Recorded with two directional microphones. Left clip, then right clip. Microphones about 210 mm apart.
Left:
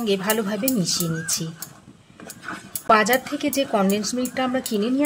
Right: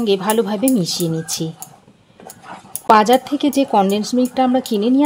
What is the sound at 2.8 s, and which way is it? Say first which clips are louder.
Speech: right 6 dB; 30° right (ahead or behind).